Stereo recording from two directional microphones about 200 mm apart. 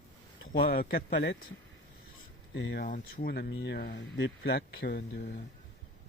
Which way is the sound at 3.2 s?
50° left (ahead or behind).